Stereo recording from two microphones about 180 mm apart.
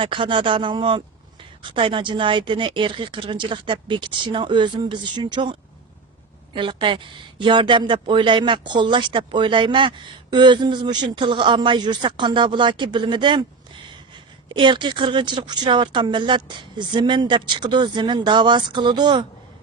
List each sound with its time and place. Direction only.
0.0 s speech: 30° right (ahead or behind)
14.5 s speech: 25° right (ahead or behind)